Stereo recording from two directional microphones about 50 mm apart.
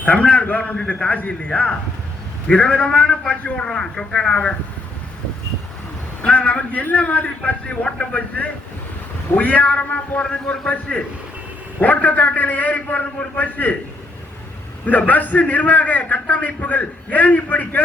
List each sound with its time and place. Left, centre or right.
0.0 s a man's voice: left
1.5 s a man's voice: centre
6.2 s a man's voice: left
10.4 s a man's voice: centre
11.8 s a man's voice: left
14.8 s a man's voice: left